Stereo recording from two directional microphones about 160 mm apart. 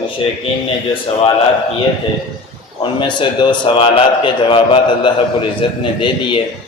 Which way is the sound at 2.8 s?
30° left (ahead or behind).